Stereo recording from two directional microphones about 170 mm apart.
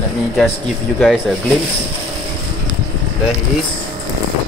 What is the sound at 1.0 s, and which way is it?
Speech, centre (ahead or behind).